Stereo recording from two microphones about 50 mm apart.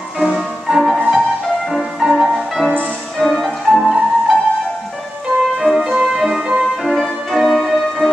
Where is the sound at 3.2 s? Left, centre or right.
Centre.